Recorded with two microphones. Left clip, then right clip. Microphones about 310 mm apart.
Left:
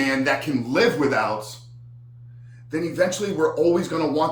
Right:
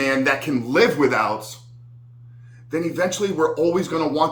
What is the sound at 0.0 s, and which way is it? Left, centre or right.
Speech, centre.